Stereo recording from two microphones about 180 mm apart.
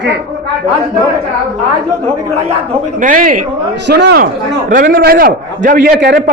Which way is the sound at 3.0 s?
50° right (ahead or behind).